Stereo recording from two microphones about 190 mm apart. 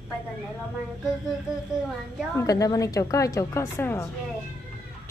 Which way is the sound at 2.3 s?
15° left (ahead or behind).